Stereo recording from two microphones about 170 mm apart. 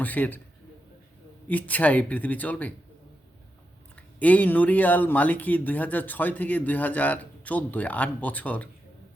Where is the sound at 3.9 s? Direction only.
10° left (ahead or behind).